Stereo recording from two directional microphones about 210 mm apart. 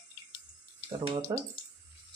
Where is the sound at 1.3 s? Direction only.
20° right (ahead or behind).